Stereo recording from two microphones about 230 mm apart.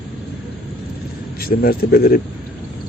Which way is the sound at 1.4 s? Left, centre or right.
Left.